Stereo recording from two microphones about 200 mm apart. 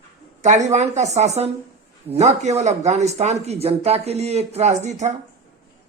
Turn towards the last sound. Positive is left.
turn(degrees=-35)  # may be behind; listen again after turning